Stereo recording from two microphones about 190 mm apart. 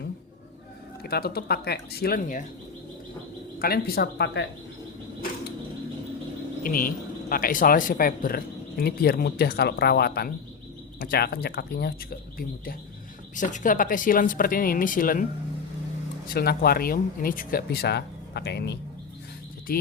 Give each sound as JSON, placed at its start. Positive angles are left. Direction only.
{"t": 1.0, "sound": "speech", "side_deg": 55}
{"t": 3.6, "sound": "speech", "side_deg": 50}
{"t": 6.6, "sound": "speech", "side_deg": 50}
{"t": 13.3, "sound": "speech", "side_deg": 40}
{"t": 16.2, "sound": "speech", "side_deg": 55}
{"t": 19.7, "sound": "speech", "side_deg": 50}